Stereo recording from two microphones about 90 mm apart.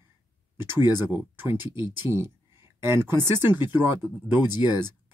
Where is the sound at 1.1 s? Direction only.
20° right (ahead or behind).